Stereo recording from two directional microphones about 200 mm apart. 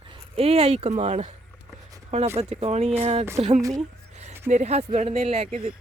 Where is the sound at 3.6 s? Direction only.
15° right (ahead or behind).